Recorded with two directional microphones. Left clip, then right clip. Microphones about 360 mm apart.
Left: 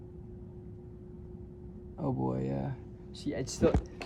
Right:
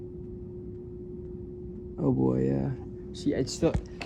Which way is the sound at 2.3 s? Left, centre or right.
Centre.